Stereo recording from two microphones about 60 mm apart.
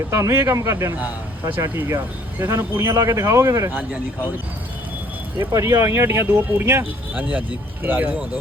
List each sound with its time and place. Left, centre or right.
0.1 s speech: right
1.5 s speech: right
5.5 s speech: right
7.1 s speech: right